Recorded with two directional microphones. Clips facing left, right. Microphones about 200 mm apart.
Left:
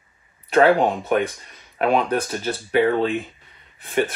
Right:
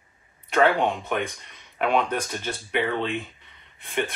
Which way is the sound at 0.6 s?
40° left (ahead or behind).